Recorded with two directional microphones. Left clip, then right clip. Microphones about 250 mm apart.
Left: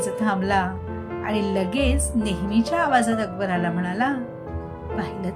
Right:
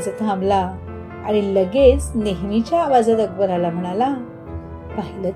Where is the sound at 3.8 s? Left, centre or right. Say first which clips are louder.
Right 4 dB; centre.